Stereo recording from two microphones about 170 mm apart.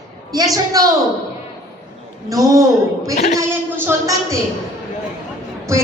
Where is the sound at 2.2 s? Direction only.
20° right (ahead or behind).